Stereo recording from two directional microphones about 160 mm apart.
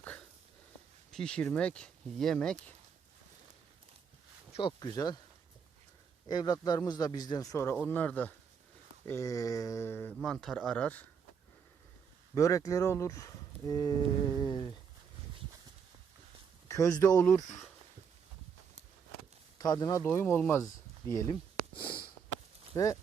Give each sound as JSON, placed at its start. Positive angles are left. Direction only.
{"t": 0.0, "sound": "a sound", "side_deg": 10}
{"t": 1.1, "sound": "speech", "side_deg": 5}
{"t": 4.5, "sound": "a man's voice", "side_deg": 30}
{"t": 6.2, "sound": "a man's voice", "side_deg": 25}
{"t": 9.0, "sound": "a sound", "side_deg": 20}
{"t": 10.2, "sound": "speech", "side_deg": 0}
{"t": 12.3, "sound": "a man's voice", "side_deg": 20}
{"t": 16.6, "sound": "speech", "side_deg": 20}
{"t": 19.5, "sound": "a sound", "side_deg": 25}
{"t": 21.1, "sound": "a man's voice", "side_deg": 20}
{"t": 21.8, "sound": "a man's voice", "side_deg": 30}